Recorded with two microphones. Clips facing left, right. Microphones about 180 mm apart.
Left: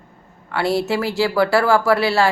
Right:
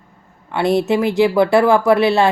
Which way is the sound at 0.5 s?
20° right (ahead or behind).